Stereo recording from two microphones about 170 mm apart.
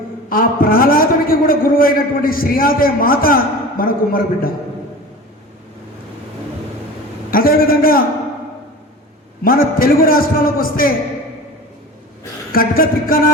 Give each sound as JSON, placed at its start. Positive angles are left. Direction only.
{"t": 0.3, "sound": "a man's voice", "side_deg": 60}
{"t": 7.3, "sound": "a man's voice", "side_deg": 60}
{"t": 9.4, "sound": "a man's voice", "side_deg": 55}
{"t": 12.5, "sound": "a man's voice", "side_deg": 60}